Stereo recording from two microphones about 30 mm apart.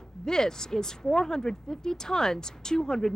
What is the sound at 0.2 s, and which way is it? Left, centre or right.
Speech, left.